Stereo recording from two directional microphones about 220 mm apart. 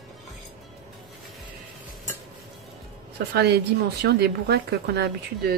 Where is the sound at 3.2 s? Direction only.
50° right (ahead or behind).